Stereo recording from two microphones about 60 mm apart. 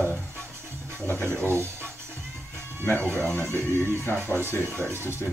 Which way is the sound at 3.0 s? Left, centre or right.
Right.